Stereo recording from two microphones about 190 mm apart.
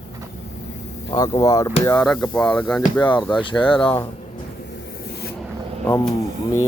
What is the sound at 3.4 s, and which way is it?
Speech, 25° left (ahead or behind).